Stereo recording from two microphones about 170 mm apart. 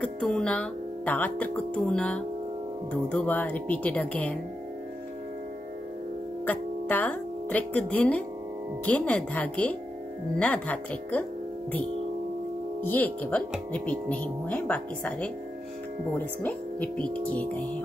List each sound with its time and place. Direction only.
0.0 s speech: 5° left (ahead or behind)
6.4 s speech: 10° left (ahead or behind)
12.8 s speech: 10° left (ahead or behind)
16.4 s speech: 10° left (ahead or behind)